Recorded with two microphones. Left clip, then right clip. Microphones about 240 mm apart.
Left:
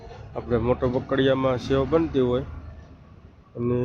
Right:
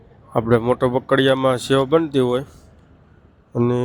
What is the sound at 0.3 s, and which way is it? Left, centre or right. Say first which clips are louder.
Speech: right 7 dB; right.